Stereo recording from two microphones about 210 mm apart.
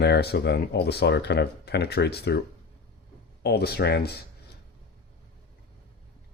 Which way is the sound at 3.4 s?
50° left (ahead or behind).